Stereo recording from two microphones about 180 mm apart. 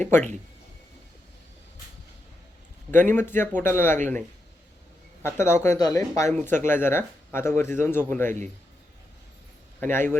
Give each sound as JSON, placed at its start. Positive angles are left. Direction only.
{"t": 0.1, "sound": "a man's voice", "side_deg": 10}
{"t": 2.9, "sound": "a man's voice", "side_deg": 10}
{"t": 5.2, "sound": "a man's voice", "side_deg": 15}
{"t": 9.8, "sound": "a man's voice", "side_deg": 10}